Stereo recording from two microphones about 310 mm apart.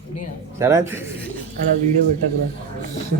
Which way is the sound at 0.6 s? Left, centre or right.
Centre.